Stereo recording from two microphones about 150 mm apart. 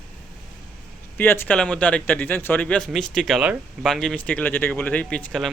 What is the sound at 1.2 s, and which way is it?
A man's voice, 15° left (ahead or behind).